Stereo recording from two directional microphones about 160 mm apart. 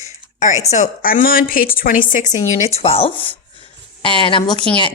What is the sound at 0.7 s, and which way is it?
Speech, 55° left (ahead or behind).